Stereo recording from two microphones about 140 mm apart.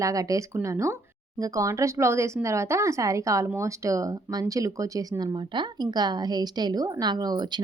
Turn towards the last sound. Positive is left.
turn(degrees=-30)  # may be behind; listen again after turning